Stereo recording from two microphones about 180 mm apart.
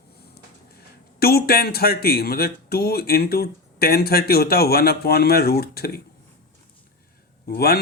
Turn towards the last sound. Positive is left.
turn(degrees=60)  # may be behind; listen again after turning